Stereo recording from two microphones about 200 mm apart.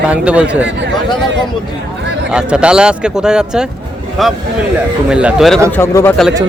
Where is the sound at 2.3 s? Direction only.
5° right (ahead or behind).